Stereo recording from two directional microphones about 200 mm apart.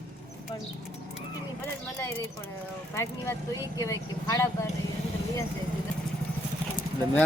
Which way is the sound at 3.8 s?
15° left (ahead or behind).